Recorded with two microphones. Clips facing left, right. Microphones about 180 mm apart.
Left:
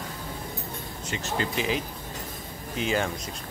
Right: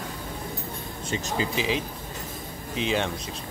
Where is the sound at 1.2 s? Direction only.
10° right (ahead or behind).